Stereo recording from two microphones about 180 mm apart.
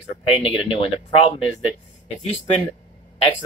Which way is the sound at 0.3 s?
30° left (ahead or behind).